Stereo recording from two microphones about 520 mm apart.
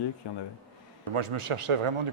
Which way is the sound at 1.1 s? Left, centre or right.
Right.